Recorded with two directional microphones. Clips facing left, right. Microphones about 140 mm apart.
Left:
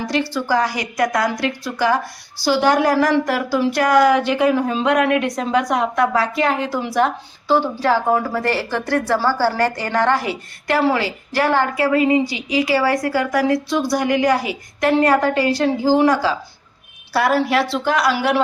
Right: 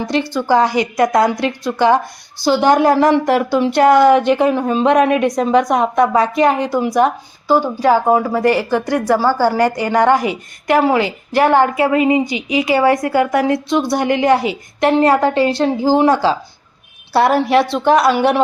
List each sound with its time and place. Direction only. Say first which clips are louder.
0.0 s a woman's voice: right 3 dB; 20° right (ahead or behind)